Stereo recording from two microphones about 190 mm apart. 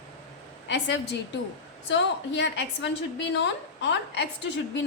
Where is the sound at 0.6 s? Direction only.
65° left (ahead or behind).